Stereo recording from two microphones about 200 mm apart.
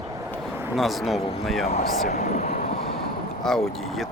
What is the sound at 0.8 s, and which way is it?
Speech, centre (ahead or behind).